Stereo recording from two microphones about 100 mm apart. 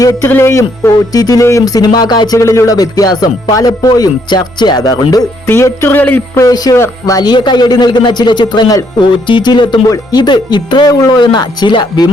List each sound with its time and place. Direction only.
0.0 s speech: 25° left (ahead or behind)
5.5 s music: 25° left (ahead or behind)
6.4 s speech: 35° left (ahead or behind)